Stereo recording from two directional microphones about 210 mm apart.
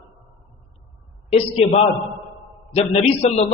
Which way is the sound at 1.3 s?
30° left (ahead or behind).